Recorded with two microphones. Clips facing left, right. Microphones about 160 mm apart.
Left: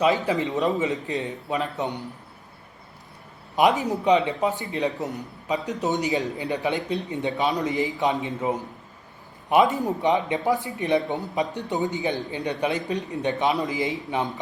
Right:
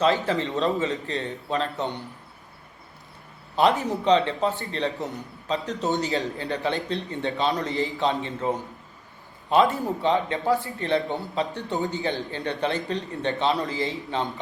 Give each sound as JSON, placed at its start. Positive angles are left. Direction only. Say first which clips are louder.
{"t": 0.0, "sound": "a man's voice", "louder": "left 1 dB", "side_deg": 15}
{"t": 3.5, "sound": "a man's voice", "louder": "left 1 dB", "side_deg": 15}